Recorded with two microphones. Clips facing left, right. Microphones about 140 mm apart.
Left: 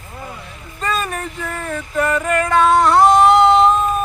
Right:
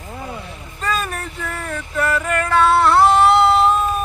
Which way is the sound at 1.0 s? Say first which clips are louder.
Left 2 dB; 5° left (ahead or behind).